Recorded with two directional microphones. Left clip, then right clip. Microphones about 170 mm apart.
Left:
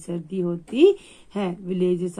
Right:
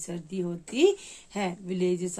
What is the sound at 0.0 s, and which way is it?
Speech, 30° left (ahead or behind).